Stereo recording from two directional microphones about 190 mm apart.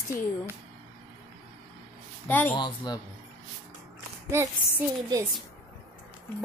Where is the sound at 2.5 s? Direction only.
20° left (ahead or behind).